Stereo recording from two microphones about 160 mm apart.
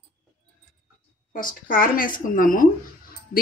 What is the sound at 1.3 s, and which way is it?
Speech, 60° left (ahead or behind).